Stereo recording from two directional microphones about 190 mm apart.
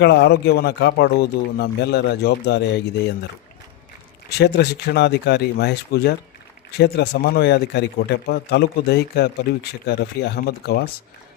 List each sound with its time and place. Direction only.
0.0 s speech: 60° left (ahead or behind)
4.3 s speech: 60° left (ahead or behind)